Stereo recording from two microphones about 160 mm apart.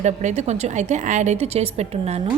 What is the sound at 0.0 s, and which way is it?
A woman's voice, 45° right (ahead or behind).